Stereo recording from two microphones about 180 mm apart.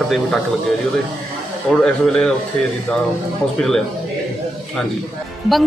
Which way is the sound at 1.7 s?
5° left (ahead or behind).